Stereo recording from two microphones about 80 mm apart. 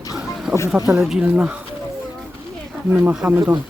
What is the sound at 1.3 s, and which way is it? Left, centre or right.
Speech, centre.